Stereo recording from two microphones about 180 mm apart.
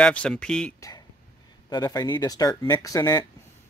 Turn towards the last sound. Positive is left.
turn(degrees=20)  # may be behind; listen again after turning